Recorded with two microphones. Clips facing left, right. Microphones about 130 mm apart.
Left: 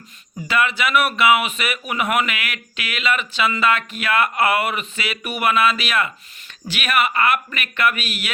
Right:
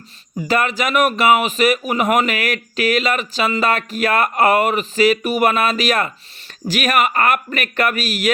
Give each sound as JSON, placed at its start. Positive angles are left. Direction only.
{"t": 0.3, "sound": "speech", "side_deg": -40}